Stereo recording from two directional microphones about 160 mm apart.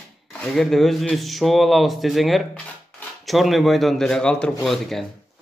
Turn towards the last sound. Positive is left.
turn(degrees=0)  # may be behind; listen again after turning